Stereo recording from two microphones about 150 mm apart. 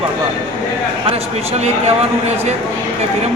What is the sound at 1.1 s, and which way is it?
Speech, 45° right (ahead or behind).